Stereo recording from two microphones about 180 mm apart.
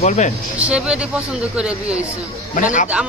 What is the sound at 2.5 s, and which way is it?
Speech, 45° left (ahead or behind).